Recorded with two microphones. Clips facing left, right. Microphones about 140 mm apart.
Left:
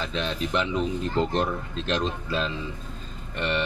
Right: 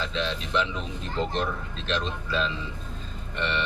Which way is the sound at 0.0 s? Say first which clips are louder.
Left 1 dB; 45° left (ahead or behind).